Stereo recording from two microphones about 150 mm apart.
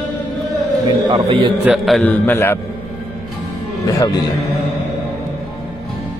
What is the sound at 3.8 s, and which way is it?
Speech, 25° left (ahead or behind).